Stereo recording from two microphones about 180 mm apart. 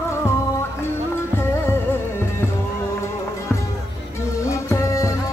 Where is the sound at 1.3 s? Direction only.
15° left (ahead or behind).